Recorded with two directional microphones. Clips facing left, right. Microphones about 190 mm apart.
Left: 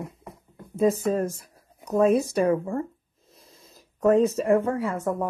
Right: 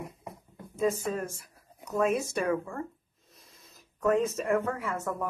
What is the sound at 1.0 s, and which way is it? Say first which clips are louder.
Speech: left 8 dB; 40° left (ahead or behind).